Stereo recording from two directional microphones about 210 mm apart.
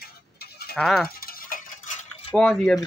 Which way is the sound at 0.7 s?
Centre (ahead or behind).